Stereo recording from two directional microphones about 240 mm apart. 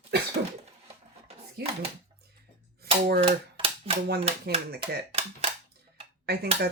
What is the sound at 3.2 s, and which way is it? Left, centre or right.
Typewriter, right.